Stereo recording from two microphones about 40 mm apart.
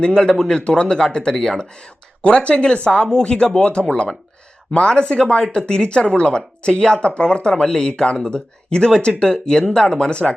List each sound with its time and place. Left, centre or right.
0.0 s speech: centre